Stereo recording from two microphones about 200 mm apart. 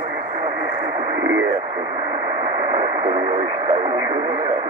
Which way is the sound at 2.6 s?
30° right (ahead or behind).